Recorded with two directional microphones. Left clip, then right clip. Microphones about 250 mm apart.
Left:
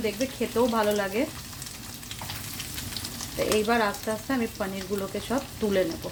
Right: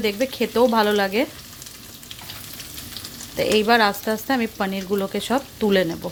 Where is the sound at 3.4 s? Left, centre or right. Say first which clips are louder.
Right 7 dB; right.